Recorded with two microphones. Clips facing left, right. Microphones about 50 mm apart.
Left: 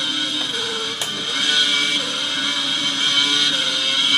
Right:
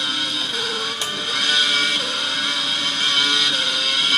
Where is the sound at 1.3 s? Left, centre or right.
Left.